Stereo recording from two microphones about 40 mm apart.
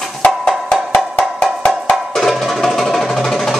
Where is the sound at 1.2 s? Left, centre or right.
Left.